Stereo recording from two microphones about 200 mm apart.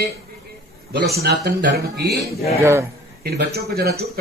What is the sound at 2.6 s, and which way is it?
Speech, 15° right (ahead or behind).